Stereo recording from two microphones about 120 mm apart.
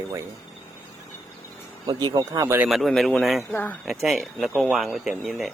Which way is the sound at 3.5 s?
15° left (ahead or behind).